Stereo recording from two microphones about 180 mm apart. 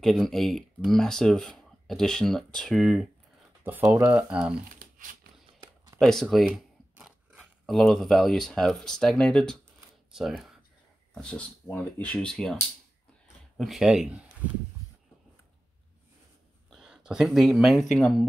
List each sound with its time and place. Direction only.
0.0 s speech: centre (ahead or behind)
4.6 s crumpling: 50° right (ahead or behind)
5.9 s speech: centre (ahead or behind)
13.6 s speech: centre (ahead or behind)
16.7 s speech: 5° right (ahead or behind)